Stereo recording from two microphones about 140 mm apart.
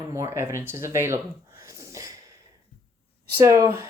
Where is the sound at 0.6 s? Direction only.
15° right (ahead or behind).